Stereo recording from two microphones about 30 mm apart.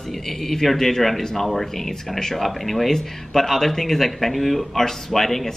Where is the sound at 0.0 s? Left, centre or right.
Centre.